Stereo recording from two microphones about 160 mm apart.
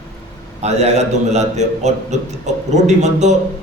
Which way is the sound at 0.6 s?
45° right (ahead or behind).